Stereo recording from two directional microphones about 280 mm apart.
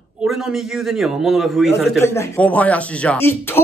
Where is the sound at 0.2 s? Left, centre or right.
Centre.